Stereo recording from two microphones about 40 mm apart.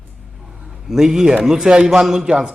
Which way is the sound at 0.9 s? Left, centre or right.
Centre.